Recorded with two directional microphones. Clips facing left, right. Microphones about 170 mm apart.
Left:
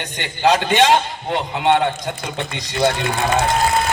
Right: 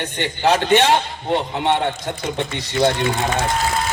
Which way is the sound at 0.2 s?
15° left (ahead or behind).